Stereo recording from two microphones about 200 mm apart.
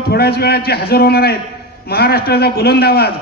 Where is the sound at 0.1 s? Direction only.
50° left (ahead or behind).